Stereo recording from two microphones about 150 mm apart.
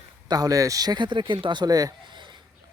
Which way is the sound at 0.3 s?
25° right (ahead or behind).